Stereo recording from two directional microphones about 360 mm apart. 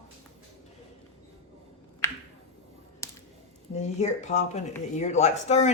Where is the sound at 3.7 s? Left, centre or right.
Centre.